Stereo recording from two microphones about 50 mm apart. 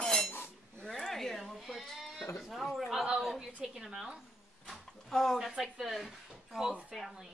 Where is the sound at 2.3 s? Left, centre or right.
Centre.